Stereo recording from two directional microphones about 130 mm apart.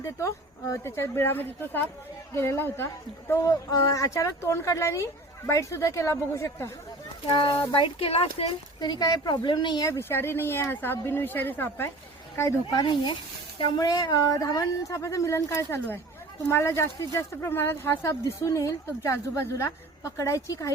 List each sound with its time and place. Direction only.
0.0 s a woman's voice: 25° left (ahead or behind)
7.3 s a woman's voice: 40° left (ahead or behind); by 20.7 s 25° left (ahead or behind)